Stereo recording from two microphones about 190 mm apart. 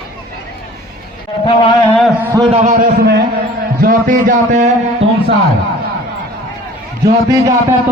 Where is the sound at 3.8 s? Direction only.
45° right (ahead or behind).